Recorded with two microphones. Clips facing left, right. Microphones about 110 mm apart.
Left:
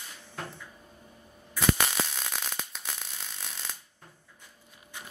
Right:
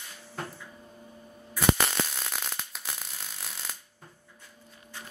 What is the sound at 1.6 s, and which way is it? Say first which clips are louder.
Fireworks: right 2 dB; centre (ahead or behind).